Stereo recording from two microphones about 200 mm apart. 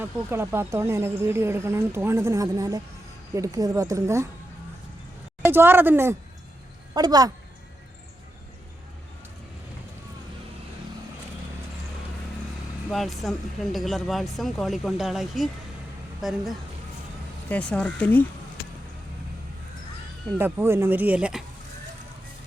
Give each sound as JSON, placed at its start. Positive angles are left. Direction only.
{"t": 0.0, "sound": "speech", "side_deg": -10}
{"t": 5.4, "sound": "speech", "side_deg": -10}
{"t": 12.9, "sound": "speech", "side_deg": 0}
{"t": 20.4, "sound": "speech", "side_deg": -10}